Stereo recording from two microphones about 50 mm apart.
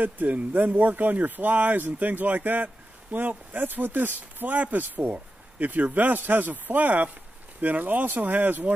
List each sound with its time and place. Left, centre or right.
0.0 s speech: right